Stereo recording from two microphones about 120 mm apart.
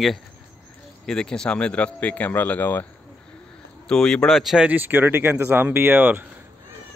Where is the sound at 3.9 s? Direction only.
5° left (ahead or behind); by 6.2 s 15° right (ahead or behind).